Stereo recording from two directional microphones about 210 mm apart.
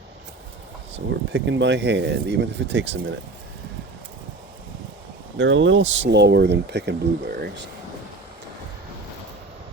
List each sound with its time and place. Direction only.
0.9 s speech: 60° right (ahead or behind)
5.4 s speech: 60° right (ahead or behind)